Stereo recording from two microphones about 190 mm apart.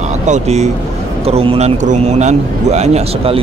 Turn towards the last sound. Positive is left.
turn(degrees=-35)  # may be behind; listen again after turning